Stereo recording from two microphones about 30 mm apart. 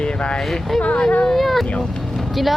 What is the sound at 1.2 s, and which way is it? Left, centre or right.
Speech, centre.